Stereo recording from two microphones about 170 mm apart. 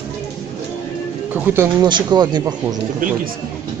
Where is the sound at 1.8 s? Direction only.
25° right (ahead or behind).